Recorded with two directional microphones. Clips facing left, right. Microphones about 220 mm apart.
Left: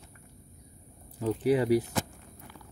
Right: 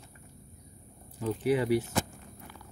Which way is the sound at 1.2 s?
35° left (ahead or behind).